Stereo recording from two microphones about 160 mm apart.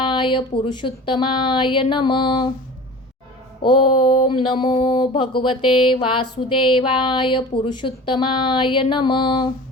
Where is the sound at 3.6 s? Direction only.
30° left (ahead or behind).